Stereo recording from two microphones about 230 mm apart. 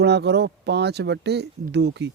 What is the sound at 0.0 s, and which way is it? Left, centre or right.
Speech, right.